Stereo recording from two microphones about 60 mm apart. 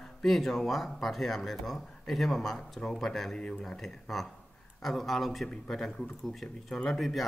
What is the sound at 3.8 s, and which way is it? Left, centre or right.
Speech, centre.